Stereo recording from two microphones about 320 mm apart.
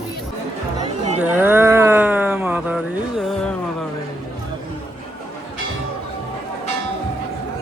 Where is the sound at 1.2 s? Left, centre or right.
Centre.